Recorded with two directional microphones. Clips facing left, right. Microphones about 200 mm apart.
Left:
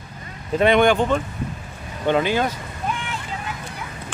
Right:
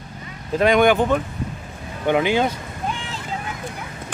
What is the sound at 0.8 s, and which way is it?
Speech, 10° right (ahead or behind).